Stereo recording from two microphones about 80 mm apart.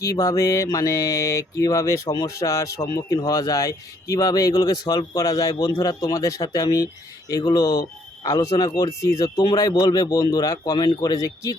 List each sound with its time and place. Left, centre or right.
0.0 s speech: left